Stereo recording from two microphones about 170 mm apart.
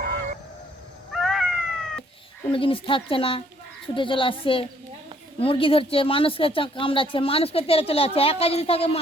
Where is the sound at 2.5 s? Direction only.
30° left (ahead or behind).